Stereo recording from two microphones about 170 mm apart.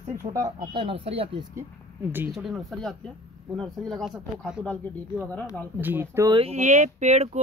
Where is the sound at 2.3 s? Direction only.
Centre (ahead or behind).